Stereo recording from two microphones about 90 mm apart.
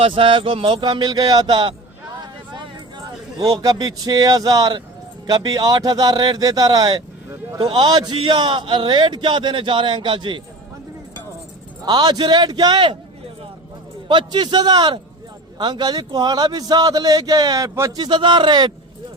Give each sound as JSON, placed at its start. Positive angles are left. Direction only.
{"t": 0.0, "sound": "a man's voice", "side_deg": -80}
{"t": 3.0, "sound": "a man's voice", "side_deg": -45}
{"t": 11.9, "sound": "a man's voice", "side_deg": -50}
{"t": 14.1, "sound": "a man's voice", "side_deg": -60}
{"t": 17.9, "sound": "a man's voice", "side_deg": -55}